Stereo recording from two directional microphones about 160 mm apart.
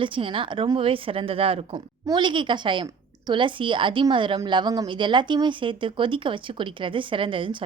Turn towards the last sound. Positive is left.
turn(degrees=-30)  # may be behind; listen again after turning